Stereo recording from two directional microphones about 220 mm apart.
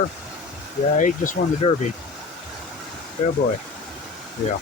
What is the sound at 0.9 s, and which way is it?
Speech, 35° left (ahead or behind).